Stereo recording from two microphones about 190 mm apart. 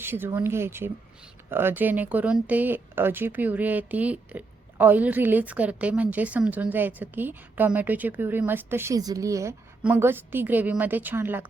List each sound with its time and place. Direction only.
0.0 s speech: 10° right (ahead or behind)